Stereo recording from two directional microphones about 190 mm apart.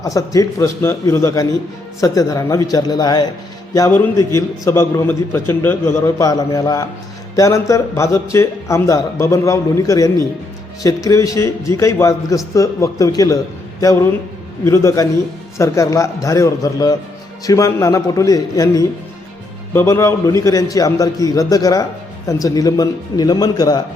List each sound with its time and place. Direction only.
0.0 s a man's voice: 15° left (ahead or behind)